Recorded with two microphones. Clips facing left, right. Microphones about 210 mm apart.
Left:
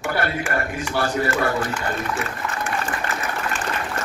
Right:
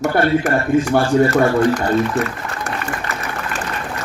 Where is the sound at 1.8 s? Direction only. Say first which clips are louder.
Right 9 dB; 40° right (ahead or behind).